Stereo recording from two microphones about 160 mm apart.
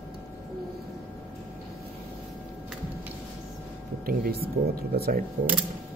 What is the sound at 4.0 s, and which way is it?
Speech, 65° right (ahead or behind).